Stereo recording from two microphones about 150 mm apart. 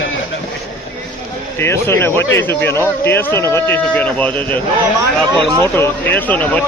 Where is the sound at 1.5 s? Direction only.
15° left (ahead or behind).